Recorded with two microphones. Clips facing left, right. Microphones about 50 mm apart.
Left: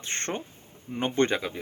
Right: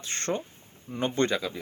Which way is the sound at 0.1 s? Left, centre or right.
Left.